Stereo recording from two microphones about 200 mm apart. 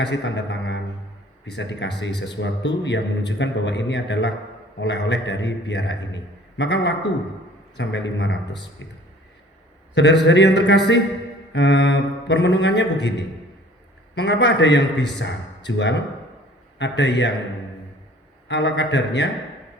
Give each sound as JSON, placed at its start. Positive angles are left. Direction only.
{"t": 0.0, "sound": "a man's voice", "side_deg": 60}
{"t": 9.9, "sound": "a man's voice", "side_deg": 60}
{"t": 18.4, "sound": "a man's voice", "side_deg": 60}